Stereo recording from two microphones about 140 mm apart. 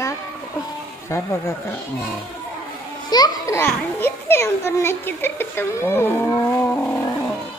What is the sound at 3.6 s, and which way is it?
A child's voice, 15° left (ahead or behind).